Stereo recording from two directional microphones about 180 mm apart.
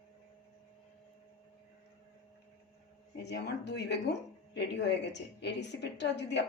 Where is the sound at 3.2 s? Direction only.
70° left (ahead or behind).